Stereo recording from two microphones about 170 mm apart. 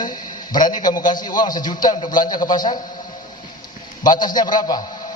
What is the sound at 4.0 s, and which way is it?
Speech, 25° left (ahead or behind).